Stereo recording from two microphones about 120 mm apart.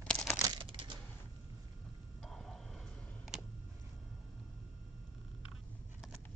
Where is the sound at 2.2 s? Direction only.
5° left (ahead or behind).